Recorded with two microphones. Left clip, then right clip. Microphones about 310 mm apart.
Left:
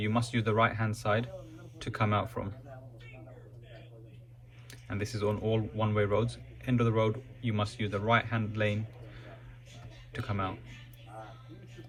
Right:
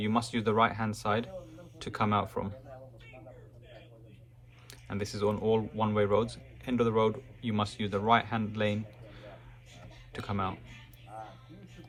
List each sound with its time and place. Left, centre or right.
0.0 s speech: centre
4.9 s speech: centre
10.1 s speech: centre